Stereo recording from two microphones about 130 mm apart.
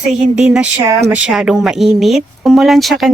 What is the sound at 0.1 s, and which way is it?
Speech, 5° right (ahead or behind).